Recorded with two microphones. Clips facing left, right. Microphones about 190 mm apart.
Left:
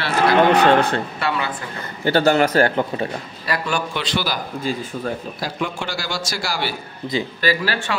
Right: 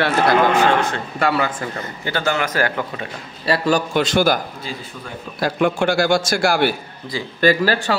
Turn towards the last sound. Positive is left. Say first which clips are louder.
# right 5 dB
turn(degrees=-40)  # may be behind; listen again after turning